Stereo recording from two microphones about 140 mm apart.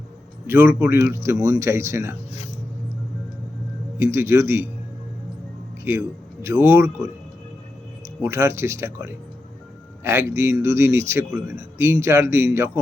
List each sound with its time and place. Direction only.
0.4 s a man's voice: 15° right (ahead or behind)
3.9 s a man's voice: 20° right (ahead or behind)
5.8 s a man's voice: 20° right (ahead or behind)
8.0 s a man's voice: 20° right (ahead or behind)